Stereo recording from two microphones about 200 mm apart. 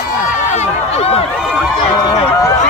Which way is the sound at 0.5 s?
30° left (ahead or behind).